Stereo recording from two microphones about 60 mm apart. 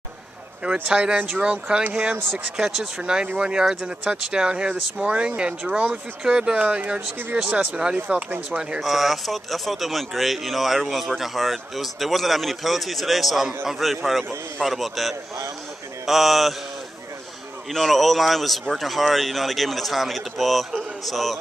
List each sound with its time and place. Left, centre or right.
0.8 s speech: centre
8.8 s speech: centre
17.6 s speech: centre